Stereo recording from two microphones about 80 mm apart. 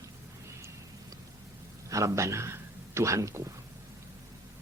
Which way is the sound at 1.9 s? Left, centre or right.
Right.